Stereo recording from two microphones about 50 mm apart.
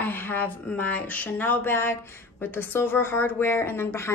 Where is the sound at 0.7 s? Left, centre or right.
Left.